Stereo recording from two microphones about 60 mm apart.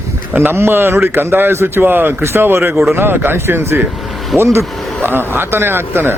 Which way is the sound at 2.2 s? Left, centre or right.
Right.